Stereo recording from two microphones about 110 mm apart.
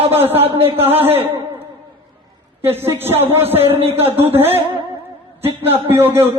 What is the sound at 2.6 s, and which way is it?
A man's voice, 20° right (ahead or behind).